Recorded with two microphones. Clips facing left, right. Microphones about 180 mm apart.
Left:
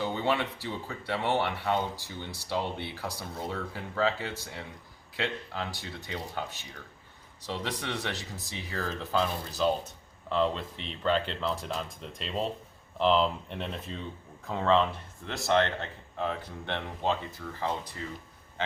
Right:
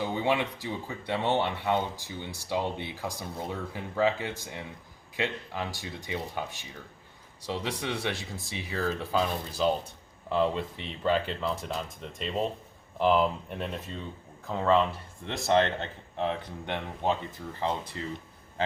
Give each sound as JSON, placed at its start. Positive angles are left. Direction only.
{"t": 0.0, "sound": "speech", "side_deg": -15}
{"t": 15.3, "sound": "speech", "side_deg": -20}